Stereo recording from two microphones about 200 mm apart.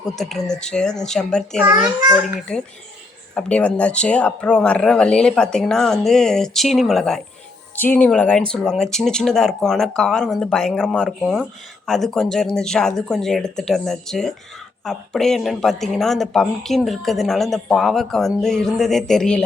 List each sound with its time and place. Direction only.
0.2 s speech: centre (ahead or behind)